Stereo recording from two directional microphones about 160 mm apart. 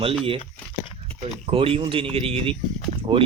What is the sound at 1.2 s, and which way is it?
Speech, 35° right (ahead or behind).